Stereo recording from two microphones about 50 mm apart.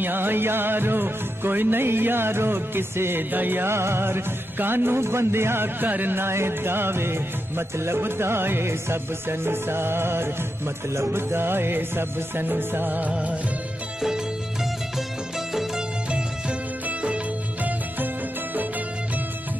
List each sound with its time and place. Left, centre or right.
0.0 s music: right
3.7 s music: right
14.0 s music: centre
17.6 s music: right